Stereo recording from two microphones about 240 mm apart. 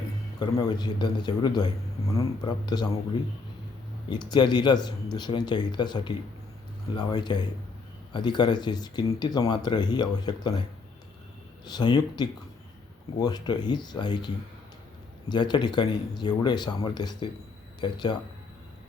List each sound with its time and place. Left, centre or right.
0.3 s a man's voice: centre
4.1 s a man's voice: centre
11.6 s a man's voice: centre
15.3 s a man's voice: centre